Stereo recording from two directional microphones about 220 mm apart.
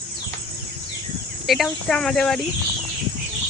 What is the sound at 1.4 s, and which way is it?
Speech, centre (ahead or behind).